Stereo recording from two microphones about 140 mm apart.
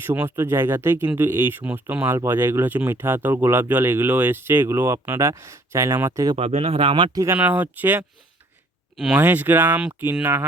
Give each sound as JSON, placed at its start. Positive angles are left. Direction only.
{"t": 0.0, "sound": "speech", "side_deg": -15}
{"t": 6.3, "sound": "speech", "side_deg": -45}
{"t": 7.3, "sound": "speech", "side_deg": -10}